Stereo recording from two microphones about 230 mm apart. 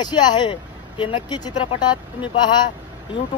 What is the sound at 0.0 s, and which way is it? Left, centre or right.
Speech, centre.